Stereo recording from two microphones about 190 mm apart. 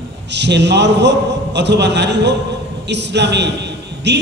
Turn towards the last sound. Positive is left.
turn(degrees=-65)  # may be behind; listen again after turning